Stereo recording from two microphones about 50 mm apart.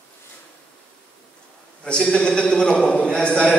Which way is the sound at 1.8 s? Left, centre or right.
Centre.